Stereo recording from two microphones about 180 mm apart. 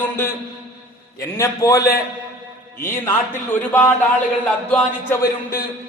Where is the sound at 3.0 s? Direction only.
10° left (ahead or behind).